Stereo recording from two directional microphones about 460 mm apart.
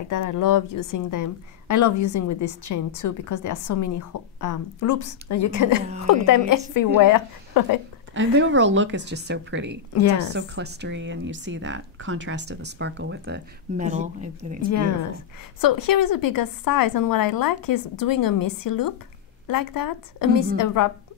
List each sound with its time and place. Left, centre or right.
0.1 s a woman's voice: left
8.1 s speech: right
15.6 s speech: left